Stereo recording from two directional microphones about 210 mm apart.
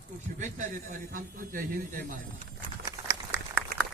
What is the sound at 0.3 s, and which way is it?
A man's voice, 35° right (ahead or behind).